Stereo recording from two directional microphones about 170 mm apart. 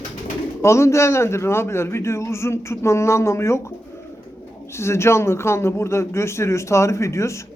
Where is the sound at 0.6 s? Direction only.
15° left (ahead or behind).